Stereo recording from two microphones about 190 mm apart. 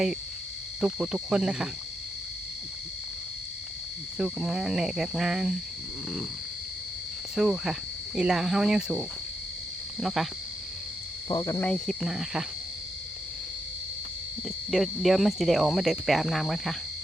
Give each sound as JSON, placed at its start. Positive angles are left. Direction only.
{"t": 0.8, "sound": "speech", "side_deg": 0}
{"t": 4.2, "sound": "speech", "side_deg": -5}
{"t": 7.3, "sound": "speech", "side_deg": 0}
{"t": 11.3, "sound": "speech", "side_deg": 20}
{"t": 11.7, "sound": "speech", "side_deg": 0}
{"t": 14.4, "sound": "speech", "side_deg": 0}